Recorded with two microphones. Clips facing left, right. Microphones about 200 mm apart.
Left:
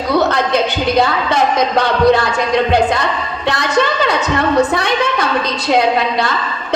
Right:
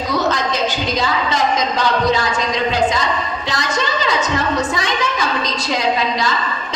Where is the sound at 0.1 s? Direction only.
60° left (ahead or behind).